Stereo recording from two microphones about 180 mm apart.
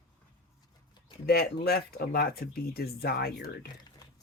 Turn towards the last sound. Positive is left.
turn(degrees=60)  # may be behind; listen again after turning